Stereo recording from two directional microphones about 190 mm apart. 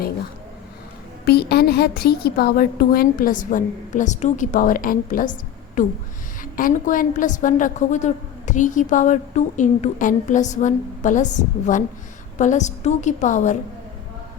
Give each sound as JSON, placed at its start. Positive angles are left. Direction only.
{"t": 1.2, "sound": "a woman's voice", "side_deg": 55}